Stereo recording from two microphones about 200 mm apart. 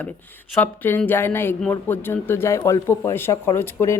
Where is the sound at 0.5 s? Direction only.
10° left (ahead or behind).